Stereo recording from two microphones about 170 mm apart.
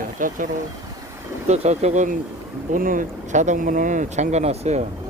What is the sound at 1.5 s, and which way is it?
Speech, 40° right (ahead or behind).